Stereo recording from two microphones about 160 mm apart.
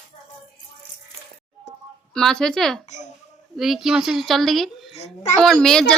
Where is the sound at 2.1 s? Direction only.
5° left (ahead or behind).